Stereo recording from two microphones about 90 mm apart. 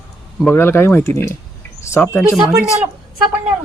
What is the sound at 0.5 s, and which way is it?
Speech, 25° left (ahead or behind).